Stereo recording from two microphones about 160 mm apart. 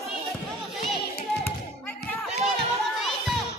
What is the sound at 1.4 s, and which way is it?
Basketball bounce, 10° left (ahead or behind).